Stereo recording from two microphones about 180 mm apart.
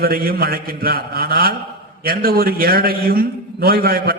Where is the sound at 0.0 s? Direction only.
55° right (ahead or behind).